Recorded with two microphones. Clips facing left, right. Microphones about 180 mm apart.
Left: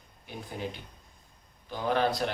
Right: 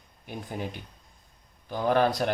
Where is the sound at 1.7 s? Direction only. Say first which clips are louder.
Right 4 dB; 50° right (ahead or behind).